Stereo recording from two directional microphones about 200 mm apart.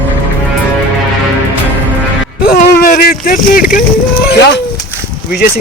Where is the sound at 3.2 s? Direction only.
45° left (ahead or behind).